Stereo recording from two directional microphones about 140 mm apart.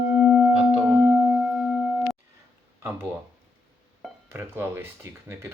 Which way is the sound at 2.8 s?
15° right (ahead or behind).